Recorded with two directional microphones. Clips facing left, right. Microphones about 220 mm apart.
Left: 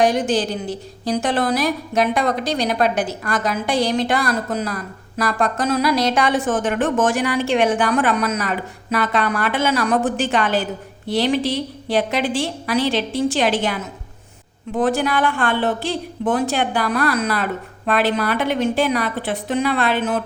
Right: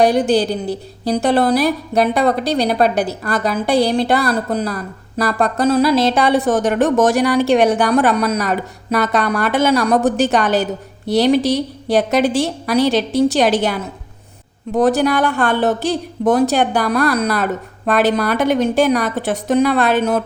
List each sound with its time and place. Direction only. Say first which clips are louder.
0.0 s a woman's voice: right 4 dB; 35° right (ahead or behind)